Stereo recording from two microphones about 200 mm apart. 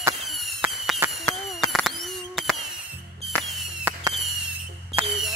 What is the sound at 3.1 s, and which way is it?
Music, centre (ahead or behind).